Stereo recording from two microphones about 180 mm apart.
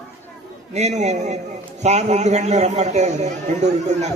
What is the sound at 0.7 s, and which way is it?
A man's voice, 40° right (ahead or behind).